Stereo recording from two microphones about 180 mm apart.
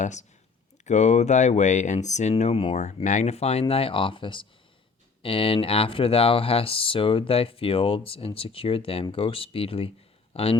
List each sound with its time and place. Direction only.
0.0 s speech: 40° left (ahead or behind)